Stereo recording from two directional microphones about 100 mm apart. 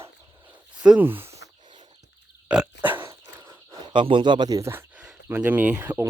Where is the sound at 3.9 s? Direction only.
55° right (ahead or behind).